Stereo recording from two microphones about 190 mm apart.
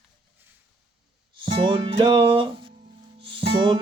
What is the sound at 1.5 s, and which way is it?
Music, 25° right (ahead or behind).